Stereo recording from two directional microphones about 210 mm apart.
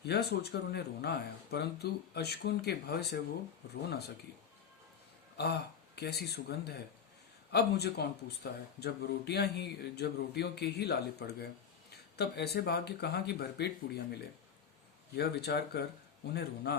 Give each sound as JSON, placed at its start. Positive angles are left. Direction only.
{"t": 0.0, "sound": "speech", "side_deg": 50}
{"t": 5.4, "sound": "speech", "side_deg": 50}